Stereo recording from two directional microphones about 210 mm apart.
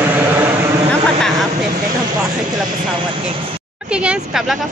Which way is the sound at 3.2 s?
25° right (ahead or behind).